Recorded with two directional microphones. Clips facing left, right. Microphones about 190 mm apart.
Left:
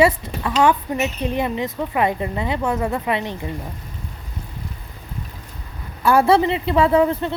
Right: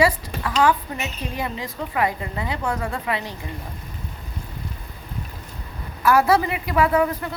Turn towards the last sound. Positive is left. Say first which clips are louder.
# left 4 dB
turn(degrees=25)  # may be behind; listen again after turning